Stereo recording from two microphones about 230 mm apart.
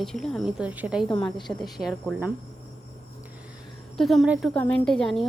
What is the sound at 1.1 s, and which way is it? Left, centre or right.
Speech, left.